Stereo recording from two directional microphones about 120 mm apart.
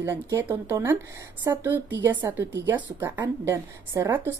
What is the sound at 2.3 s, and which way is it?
A woman's voice, 20° right (ahead or behind).